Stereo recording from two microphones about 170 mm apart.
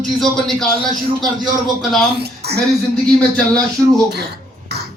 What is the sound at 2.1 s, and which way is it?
Speech, 70° right (ahead or behind).